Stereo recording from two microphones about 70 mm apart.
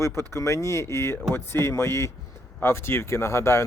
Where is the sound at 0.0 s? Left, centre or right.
Left.